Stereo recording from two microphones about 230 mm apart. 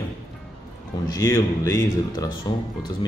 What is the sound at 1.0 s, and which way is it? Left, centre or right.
Speech, centre.